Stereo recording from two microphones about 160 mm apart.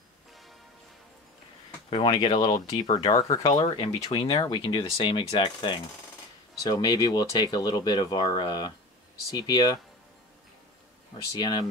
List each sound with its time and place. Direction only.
1.9 s speech: 35° left (ahead or behind)
11.3 s speech: 25° left (ahead or behind)